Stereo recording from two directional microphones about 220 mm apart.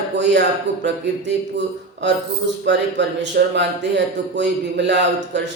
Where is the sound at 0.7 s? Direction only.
55° right (ahead or behind).